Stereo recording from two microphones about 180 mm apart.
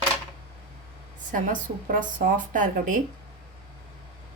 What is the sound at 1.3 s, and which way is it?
A woman's voice, 45° right (ahead or behind).